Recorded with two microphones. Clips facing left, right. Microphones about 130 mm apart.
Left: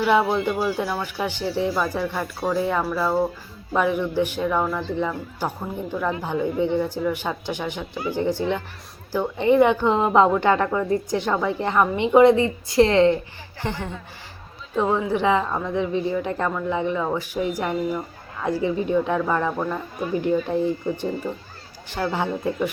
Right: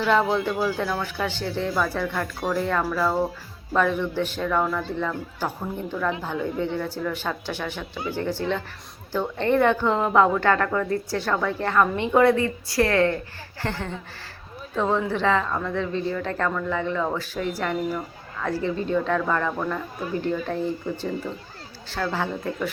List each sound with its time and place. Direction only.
0.0 s a woman's voice: 15° left (ahead or behind)